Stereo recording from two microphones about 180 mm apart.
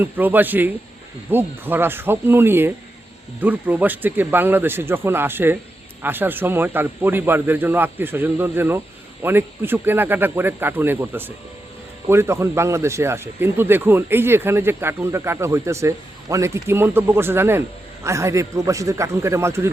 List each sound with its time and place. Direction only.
0.0 s speech: 10° right (ahead or behind)